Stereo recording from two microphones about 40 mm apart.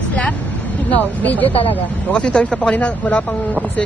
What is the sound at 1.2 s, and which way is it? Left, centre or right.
Speech, left.